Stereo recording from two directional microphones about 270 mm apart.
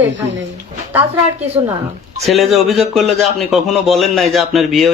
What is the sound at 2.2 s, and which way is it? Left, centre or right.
A man's voice, centre.